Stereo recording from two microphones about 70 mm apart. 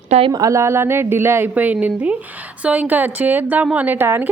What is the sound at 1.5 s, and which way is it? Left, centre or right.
A woman's voice, right.